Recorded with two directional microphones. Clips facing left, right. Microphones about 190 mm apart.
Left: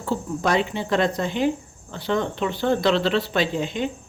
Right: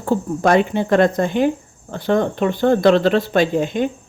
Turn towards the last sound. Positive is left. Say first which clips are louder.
# right 6 dB
turn(degrees=-50)  # may be behind; listen again after turning